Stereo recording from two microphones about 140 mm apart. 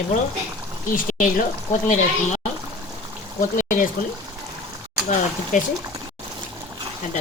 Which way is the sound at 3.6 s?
70° left (ahead or behind).